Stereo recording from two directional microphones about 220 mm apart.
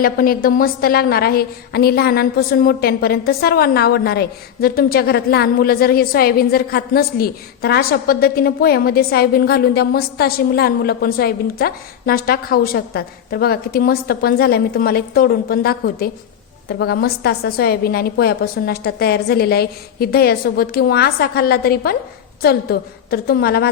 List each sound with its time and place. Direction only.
0.0 s a woman's voice: 40° left (ahead or behind)